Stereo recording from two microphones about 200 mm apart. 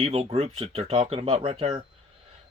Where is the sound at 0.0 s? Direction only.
30° right (ahead or behind).